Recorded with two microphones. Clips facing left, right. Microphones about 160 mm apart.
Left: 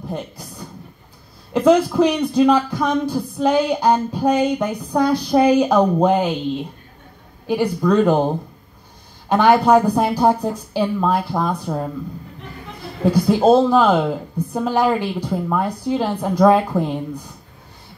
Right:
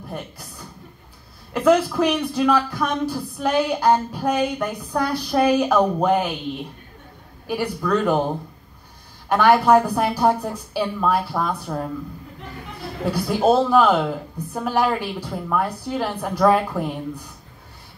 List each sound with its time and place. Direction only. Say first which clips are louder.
0.1 s speech: left 4 dB; 15° left (ahead or behind)
7.4 s speech: left 6 dB; 20° left (ahead or behind)
9.3 s speech: left 2 dB; 20° left (ahead or behind)
13.1 s speech: left 4 dB; 15° left (ahead or behind)